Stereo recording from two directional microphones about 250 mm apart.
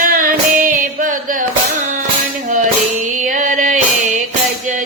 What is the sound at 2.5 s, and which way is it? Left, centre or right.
Music, right.